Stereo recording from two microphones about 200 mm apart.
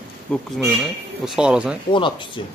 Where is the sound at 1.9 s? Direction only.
25° left (ahead or behind).